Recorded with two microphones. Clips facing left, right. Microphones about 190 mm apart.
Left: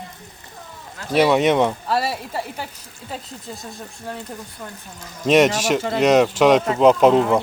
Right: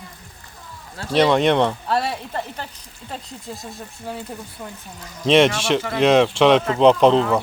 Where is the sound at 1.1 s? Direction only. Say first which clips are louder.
Even; 5° left (ahead or behind).